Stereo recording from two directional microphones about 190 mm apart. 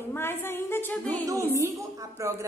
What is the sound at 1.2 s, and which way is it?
A woman's voice, 15° right (ahead or behind).